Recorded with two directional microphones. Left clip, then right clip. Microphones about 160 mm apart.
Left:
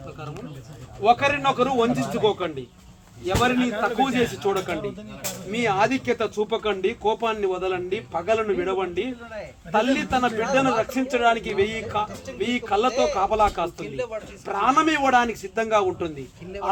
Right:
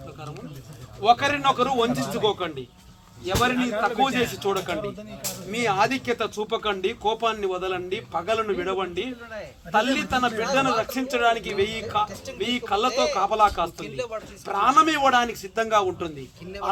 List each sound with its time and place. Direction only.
1.0 s speech: centre (ahead or behind)
3.7 s a man's voice: 15° right (ahead or behind)
4.0 s speech: 5° right (ahead or behind)